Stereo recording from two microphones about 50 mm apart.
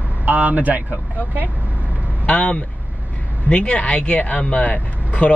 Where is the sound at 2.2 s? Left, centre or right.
Left.